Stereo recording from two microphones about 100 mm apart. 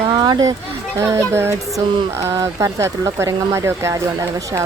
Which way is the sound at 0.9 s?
30° right (ahead or behind).